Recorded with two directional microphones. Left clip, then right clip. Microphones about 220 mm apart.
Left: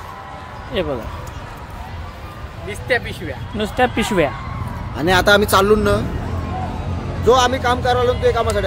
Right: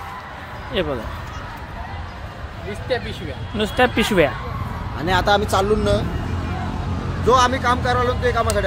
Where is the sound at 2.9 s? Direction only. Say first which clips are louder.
Left 5 dB; 30° left (ahead or behind).